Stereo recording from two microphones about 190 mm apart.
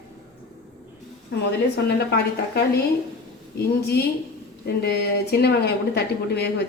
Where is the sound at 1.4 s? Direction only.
60° left (ahead or behind).